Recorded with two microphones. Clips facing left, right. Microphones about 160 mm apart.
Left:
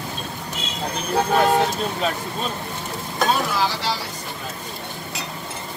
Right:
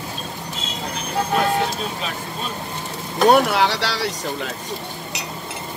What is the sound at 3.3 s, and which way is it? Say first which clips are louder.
Speech: right 8 dB; 70° right (ahead or behind).